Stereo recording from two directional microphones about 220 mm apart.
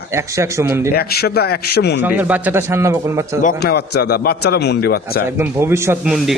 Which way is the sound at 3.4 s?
45° left (ahead or behind).